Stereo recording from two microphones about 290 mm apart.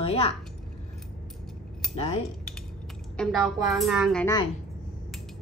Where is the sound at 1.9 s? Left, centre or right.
Left.